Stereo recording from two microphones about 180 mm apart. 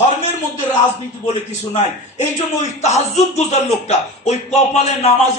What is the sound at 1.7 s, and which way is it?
Speech, 40° left (ahead or behind).